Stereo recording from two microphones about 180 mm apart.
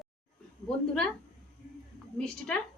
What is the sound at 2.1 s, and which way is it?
Speech, 5° left (ahead or behind).